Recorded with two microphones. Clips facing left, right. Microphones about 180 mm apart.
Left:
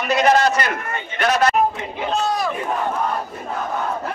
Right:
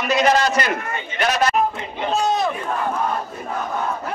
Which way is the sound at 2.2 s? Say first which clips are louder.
Right 3 dB; 20° right (ahead or behind).